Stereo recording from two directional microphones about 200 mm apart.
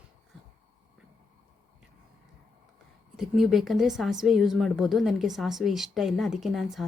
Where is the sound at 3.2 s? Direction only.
Centre (ahead or behind).